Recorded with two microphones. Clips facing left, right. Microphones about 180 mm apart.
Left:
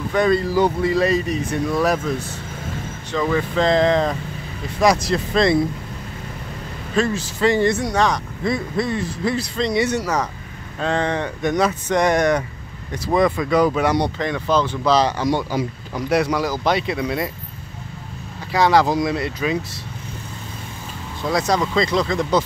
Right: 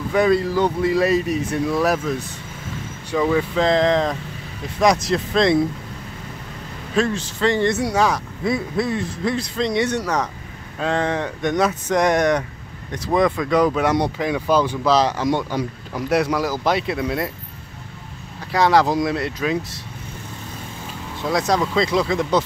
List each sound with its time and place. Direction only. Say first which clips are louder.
0.1 s speech: right 1 dB; 5° right (ahead or behind)
7.0 s speech: left 1 dB; 5° left (ahead or behind)
7.7 s speech: even; 5° right (ahead or behind)
18.5 s speech: even; centre (ahead or behind)
21.2 s speech: even; centre (ahead or behind)